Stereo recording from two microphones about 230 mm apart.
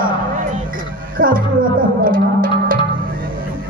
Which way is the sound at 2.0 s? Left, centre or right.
Right.